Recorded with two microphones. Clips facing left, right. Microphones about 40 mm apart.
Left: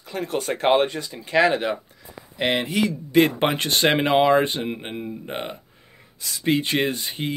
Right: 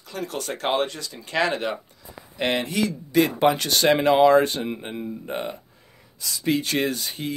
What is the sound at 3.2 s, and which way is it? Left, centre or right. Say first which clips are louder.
Speech: even; left.